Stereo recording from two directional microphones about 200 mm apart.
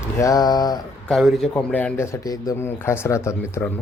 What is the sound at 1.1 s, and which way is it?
Speech, centre (ahead or behind).